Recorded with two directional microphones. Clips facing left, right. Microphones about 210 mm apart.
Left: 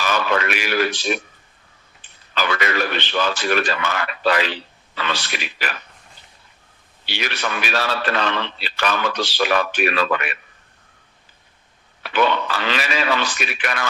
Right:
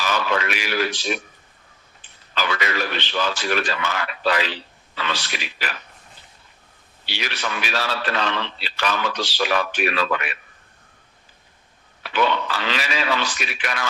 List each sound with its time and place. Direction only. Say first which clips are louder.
0.0 s a man's voice: left 2 dB; 55° left (ahead or behind)
2.3 s a man's voice: left 3 dB; 55° left (ahead or behind)
7.0 s a man's voice: left 3 dB; 55° left (ahead or behind)
12.0 s a man's voice: left 2 dB; 55° left (ahead or behind)